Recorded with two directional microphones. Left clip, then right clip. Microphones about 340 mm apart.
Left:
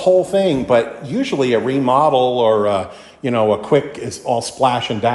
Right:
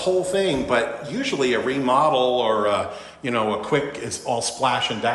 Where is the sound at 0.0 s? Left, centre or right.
Centre.